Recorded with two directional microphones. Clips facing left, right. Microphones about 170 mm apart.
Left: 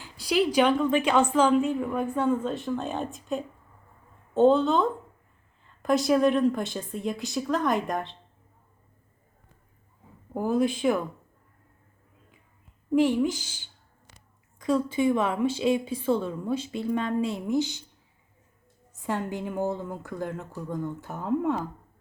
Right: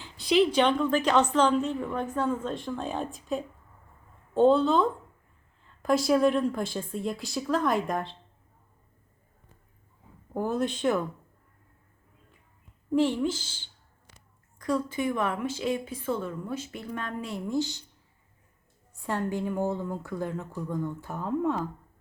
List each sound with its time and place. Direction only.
0.0 s a woman's voice: 5° left (ahead or behind)
10.3 s a woman's voice: 5° left (ahead or behind)
12.9 s a woman's voice: 10° left (ahead or behind)
14.6 s a woman's voice: 20° left (ahead or behind)
19.0 s a woman's voice: 15° left (ahead or behind)
19.8 s a woman's voice: centre (ahead or behind)
21.2 s a woman's voice: 10° left (ahead or behind)